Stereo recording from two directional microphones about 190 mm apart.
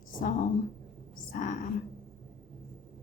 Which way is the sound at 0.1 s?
45° left (ahead or behind).